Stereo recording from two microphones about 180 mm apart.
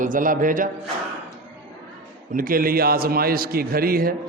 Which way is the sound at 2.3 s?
50° right (ahead or behind).